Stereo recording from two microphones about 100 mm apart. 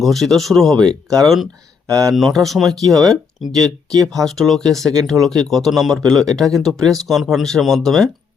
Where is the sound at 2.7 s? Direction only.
40° right (ahead or behind).